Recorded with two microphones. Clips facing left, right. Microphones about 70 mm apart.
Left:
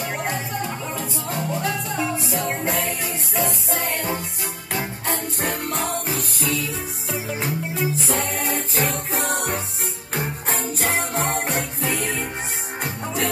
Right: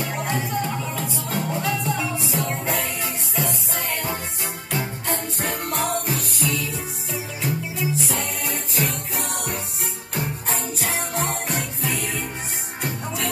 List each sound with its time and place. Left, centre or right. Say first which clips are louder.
1.6 s music: even; left